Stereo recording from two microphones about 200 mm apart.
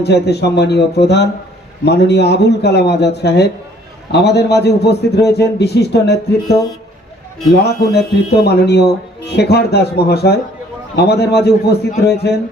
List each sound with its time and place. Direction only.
0.0 s a man's voice: 55° left (ahead or behind)
7.6 s a man's voice: 55° left (ahead or behind)